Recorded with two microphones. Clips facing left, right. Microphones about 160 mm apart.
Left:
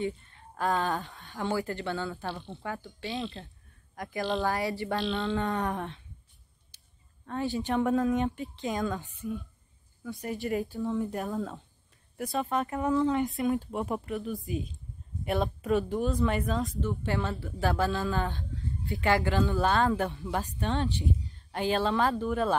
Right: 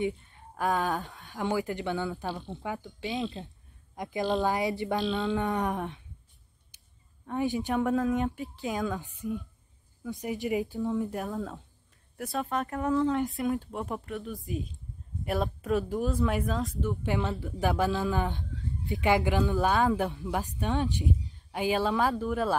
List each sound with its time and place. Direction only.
0.6 s speech: centre (ahead or behind)
1.4 s a woman's voice: 15° right (ahead or behind)
5.0 s speech: 5° right (ahead or behind)
5.4 s speech: 15° right (ahead or behind)
6.7 s a sound: 15° right (ahead or behind)
7.2 s speech: 15° right (ahead or behind)
7.7 s speech: centre (ahead or behind)
9.0 s speech: 15° right (ahead or behind)
11.0 s speech: centre (ahead or behind)
17.0 s speech: 15° right (ahead or behind)
19.8 s speech: centre (ahead or behind)
20.6 s speech: 15° right (ahead or behind)